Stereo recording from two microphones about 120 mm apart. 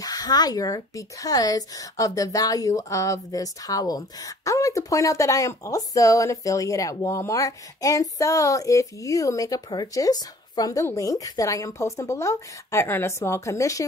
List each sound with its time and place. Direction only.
0.0 s speech: 35° left (ahead or behind)